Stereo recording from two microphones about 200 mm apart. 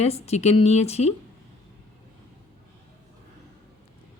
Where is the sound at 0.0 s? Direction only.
30° left (ahead or behind).